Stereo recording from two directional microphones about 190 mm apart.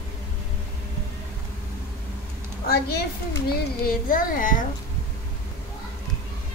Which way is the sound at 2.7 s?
55° left (ahead or behind).